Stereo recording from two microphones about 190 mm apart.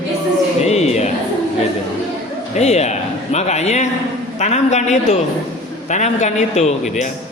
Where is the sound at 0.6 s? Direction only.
35° left (ahead or behind).